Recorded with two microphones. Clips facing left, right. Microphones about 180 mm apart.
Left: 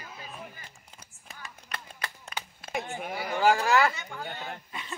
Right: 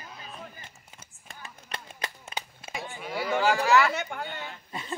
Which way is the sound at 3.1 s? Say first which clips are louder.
Right 6 dB; 90° right.